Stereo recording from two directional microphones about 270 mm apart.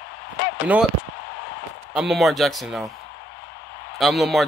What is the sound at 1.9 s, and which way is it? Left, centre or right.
Speech, centre.